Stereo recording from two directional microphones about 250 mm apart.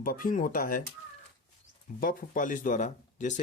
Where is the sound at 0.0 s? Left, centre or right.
Left.